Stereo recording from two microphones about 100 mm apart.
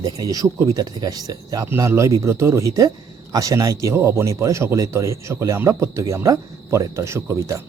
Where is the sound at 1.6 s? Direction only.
25° right (ahead or behind).